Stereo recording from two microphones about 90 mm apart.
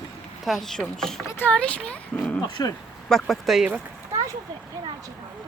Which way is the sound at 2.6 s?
45° left (ahead or behind).